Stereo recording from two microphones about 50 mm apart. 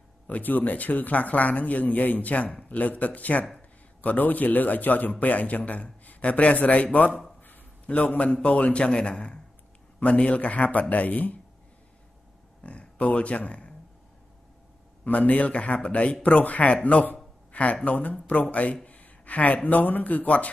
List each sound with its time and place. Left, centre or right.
0.3 s a man's voice: left
12.6 s speech: left
15.0 s a man's voice: left